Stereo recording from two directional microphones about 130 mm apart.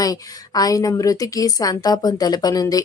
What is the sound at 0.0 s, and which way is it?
A woman's voice, 30° left (ahead or behind).